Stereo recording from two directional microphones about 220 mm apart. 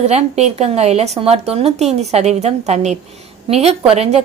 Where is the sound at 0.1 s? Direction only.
30° right (ahead or behind).